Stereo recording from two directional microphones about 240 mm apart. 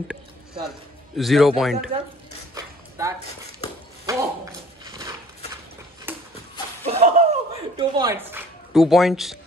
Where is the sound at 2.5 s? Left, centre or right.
Centre.